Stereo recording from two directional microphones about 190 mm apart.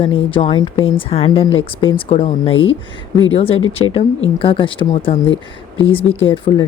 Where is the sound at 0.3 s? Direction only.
25° left (ahead or behind).